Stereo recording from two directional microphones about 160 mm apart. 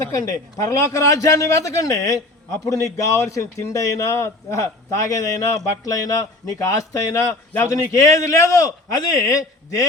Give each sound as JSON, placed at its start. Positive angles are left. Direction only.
{"t": 0.0, "sound": "a man's voice", "side_deg": 20}